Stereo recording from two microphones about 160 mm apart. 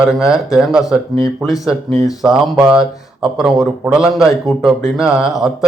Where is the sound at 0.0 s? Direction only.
5° right (ahead or behind).